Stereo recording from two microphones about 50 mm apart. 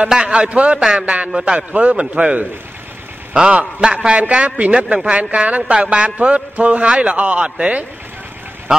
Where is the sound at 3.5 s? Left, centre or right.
Right.